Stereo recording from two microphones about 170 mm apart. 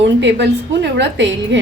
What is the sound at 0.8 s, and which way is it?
Speech, 90° right.